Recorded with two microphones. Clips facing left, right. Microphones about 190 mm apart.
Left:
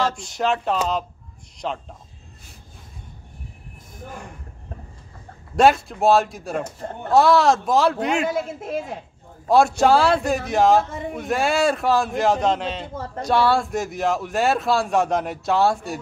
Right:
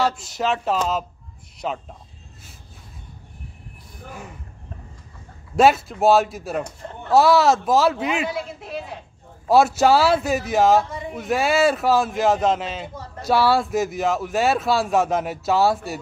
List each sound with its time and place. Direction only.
0.0 s speech: 5° right (ahead or behind)
4.1 s speech: 5° right (ahead or behind)
5.6 s speech: centre (ahead or behind)
8.3 s a woman's voice: 45° left (ahead or behind)
9.5 s speech: 5° right (ahead or behind)
10.8 s a woman's voice: 50° left (ahead or behind)
11.1 s speech: centre (ahead or behind)